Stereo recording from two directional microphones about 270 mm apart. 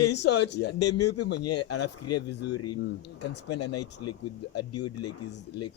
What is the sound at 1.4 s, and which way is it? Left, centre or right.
Speech, left.